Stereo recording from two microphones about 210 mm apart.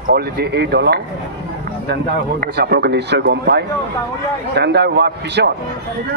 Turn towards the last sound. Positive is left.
turn(degrees=-55)  # may be behind; listen again after turning